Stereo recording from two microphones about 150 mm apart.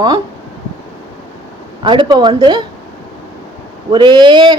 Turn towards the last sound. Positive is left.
turn(degrees=-30)  # may be behind; listen again after turning